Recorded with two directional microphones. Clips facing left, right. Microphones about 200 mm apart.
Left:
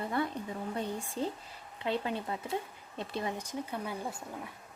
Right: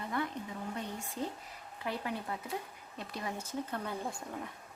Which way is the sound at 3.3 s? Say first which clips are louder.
Left 1 dB; 15° left (ahead or behind).